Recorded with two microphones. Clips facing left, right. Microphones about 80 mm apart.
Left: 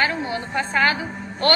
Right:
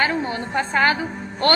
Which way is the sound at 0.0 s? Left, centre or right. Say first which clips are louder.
Right 1 dB; right.